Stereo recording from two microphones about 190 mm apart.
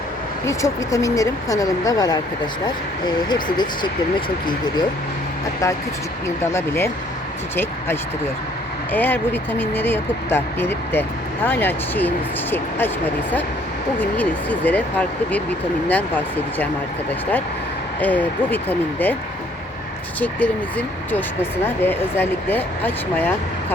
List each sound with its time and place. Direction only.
0.4 s speech: 15° left (ahead or behind)
3.2 s speech: 25° left (ahead or behind)
6.2 s speech: 15° left (ahead or behind)
14.0 s speech: 10° left (ahead or behind)
18.0 s speech: 10° left (ahead or behind)
20.1 s speech: 10° left (ahead or behind)